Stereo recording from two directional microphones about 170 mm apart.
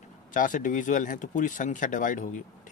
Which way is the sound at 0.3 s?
50° left (ahead or behind).